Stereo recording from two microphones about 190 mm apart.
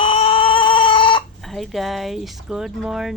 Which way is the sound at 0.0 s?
30° left (ahead or behind).